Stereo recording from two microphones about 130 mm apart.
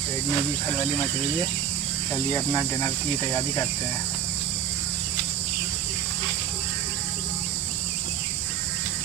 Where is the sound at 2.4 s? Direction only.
25° left (ahead or behind).